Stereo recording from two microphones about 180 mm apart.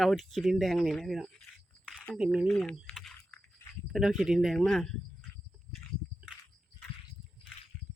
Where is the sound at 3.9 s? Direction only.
Centre (ahead or behind).